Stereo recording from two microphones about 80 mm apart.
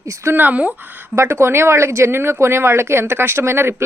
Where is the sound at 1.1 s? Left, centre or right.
Right.